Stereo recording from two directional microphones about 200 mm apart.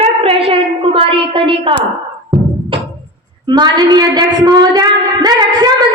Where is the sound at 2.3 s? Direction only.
20° right (ahead or behind).